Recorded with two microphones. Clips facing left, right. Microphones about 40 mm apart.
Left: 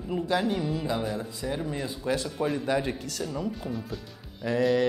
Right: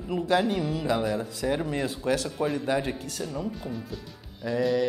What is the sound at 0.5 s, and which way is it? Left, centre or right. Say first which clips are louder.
Speech: right 2 dB; right.